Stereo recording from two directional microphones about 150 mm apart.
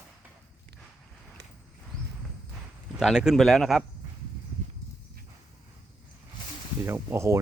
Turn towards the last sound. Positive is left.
turn(degrees=-20)  # may be behind; listen again after turning